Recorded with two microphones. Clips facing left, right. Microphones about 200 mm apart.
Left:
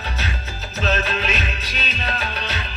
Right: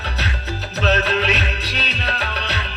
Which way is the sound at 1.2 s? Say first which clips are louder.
Right 3 dB; 65° right (ahead or behind).